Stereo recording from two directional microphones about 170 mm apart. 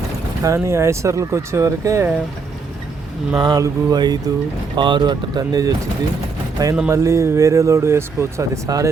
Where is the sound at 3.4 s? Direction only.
20° right (ahead or behind).